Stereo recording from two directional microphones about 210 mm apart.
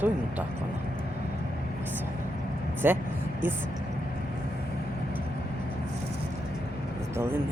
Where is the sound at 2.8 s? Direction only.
10° right (ahead or behind).